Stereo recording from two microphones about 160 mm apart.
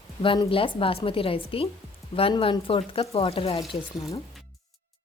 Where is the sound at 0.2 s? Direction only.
30° left (ahead or behind).